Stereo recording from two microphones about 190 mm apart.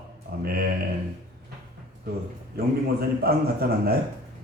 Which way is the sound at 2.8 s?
55° right (ahead or behind).